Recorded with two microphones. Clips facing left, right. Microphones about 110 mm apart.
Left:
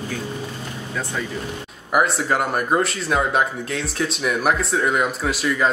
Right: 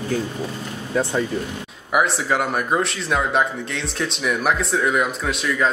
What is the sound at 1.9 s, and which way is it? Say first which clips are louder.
Speech: even; centre (ahead or behind).